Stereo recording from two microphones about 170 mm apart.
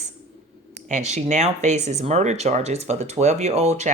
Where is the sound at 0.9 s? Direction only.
45° right (ahead or behind).